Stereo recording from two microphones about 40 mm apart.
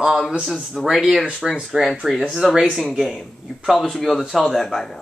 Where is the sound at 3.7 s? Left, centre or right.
Centre.